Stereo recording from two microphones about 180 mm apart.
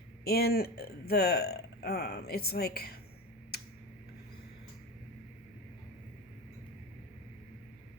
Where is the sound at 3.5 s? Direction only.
60° left (ahead or behind).